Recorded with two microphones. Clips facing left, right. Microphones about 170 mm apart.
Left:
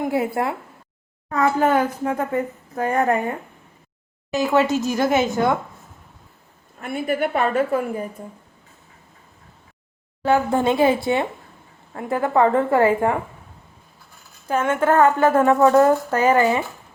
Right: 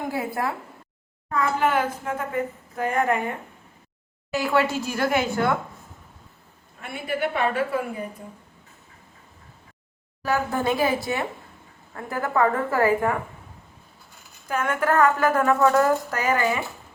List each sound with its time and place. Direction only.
0.4 s speech: 25° left (ahead or behind)
1.3 s a woman's voice: 45° left (ahead or behind)
4.3 s speech: 20° left (ahead or behind)
6.7 s a woman's voice: 50° left (ahead or behind)
10.2 s speech: 25° left (ahead or behind)
14.4 s speech: 25° left (ahead or behind)